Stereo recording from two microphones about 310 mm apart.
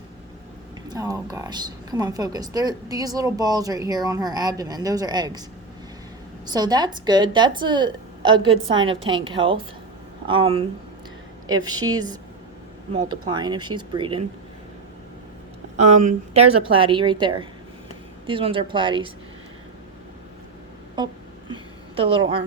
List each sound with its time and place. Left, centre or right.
0.9 s a woman's voice: centre
6.4 s a woman's voice: centre
15.8 s a woman's voice: right
21.0 s a woman's voice: centre
21.5 s a sound: centre